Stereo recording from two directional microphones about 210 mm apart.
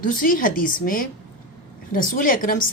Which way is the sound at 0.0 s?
40° left (ahead or behind).